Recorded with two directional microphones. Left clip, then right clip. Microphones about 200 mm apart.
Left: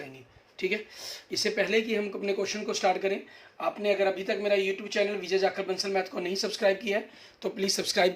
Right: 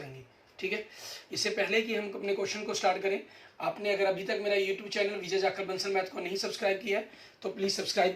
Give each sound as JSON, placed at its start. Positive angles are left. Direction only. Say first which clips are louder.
{"t": 1.3, "sound": "speech", "louder": "left 3 dB", "side_deg": 55}